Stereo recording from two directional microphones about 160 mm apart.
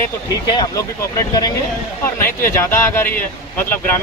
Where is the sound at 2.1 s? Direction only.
15° left (ahead or behind).